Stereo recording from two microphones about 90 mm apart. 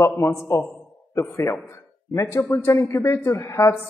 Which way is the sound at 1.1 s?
35° left (ahead or behind).